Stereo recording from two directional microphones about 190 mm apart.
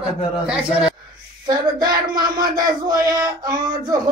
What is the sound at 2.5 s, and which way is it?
Speech, 20° right (ahead or behind).